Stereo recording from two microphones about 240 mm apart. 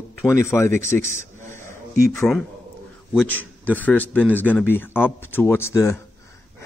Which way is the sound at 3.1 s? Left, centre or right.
Centre.